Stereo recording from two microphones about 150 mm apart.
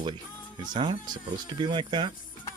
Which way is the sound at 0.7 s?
30° right (ahead or behind).